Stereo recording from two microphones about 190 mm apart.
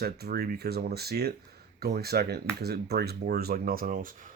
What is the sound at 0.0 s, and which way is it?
Speech, 55° right (ahead or behind).